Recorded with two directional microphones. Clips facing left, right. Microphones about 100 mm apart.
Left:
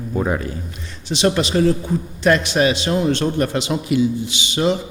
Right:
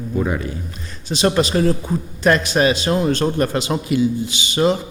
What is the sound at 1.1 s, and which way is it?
A man's voice, 40° right (ahead or behind).